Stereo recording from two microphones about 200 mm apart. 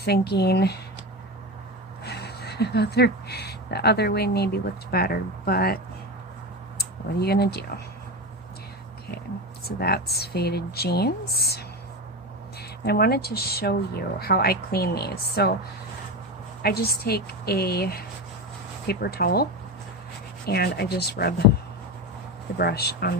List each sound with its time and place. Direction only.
0.0 s speech: 55° left (ahead or behind)
2.0 s speech: 55° left (ahead or behind)
9.6 s speech: 50° left (ahead or behind)
12.8 s speech: 50° left (ahead or behind)
16.6 s speech: 50° left (ahead or behind)
20.5 s speech: 55° left (ahead or behind)
22.5 s speech: 50° left (ahead or behind)